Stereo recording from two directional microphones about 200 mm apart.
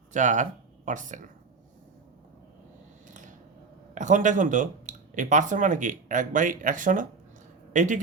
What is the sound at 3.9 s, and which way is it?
Speech, 40° right (ahead or behind).